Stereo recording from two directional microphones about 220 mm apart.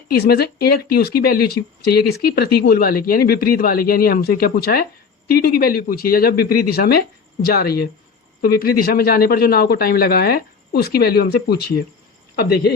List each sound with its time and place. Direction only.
0.1 s speech: 45° left (ahead or behind)